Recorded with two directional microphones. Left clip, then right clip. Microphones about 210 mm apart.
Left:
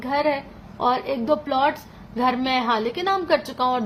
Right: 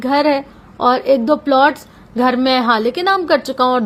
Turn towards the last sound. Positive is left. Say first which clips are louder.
# right 7 dB
turn(degrees=-35)  # may be behind; listen again after turning